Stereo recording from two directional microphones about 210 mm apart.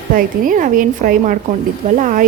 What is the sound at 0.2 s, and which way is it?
A woman's voice, 40° right (ahead or behind).